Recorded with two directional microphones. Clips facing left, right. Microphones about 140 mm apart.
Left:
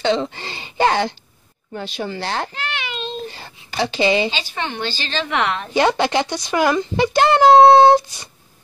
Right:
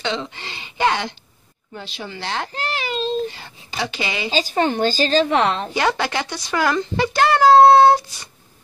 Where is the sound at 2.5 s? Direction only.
35° right (ahead or behind).